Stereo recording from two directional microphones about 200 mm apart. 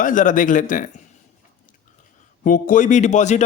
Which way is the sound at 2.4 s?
40° left (ahead or behind).